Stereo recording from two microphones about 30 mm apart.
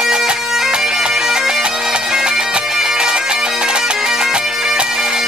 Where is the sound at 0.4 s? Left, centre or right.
Centre.